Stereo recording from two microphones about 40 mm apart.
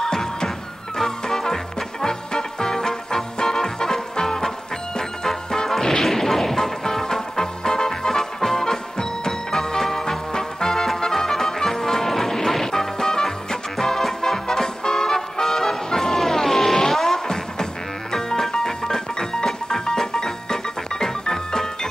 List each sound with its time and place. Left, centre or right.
0.0 s music: centre